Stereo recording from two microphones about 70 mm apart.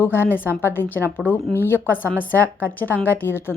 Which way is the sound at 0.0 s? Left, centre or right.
Left.